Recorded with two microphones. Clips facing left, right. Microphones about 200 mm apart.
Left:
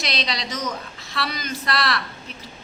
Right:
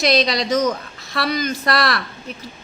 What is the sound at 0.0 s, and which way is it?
A woman's voice, 45° right (ahead or behind).